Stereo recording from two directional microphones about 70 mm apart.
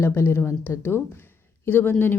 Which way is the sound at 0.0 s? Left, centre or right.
Left.